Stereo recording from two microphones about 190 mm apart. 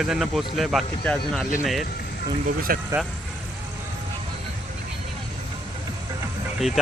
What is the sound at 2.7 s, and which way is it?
Speech, 50° right (ahead or behind).